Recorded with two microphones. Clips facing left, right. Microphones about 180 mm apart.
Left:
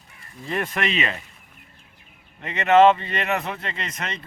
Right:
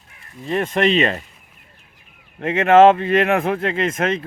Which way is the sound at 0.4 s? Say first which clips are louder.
Right 8 dB; 25° right (ahead or behind).